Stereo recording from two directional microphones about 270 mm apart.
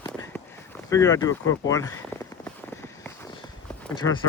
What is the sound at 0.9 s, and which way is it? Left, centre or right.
Speech, centre.